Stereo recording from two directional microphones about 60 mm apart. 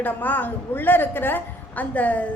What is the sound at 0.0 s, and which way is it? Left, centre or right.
A woman's voice, left.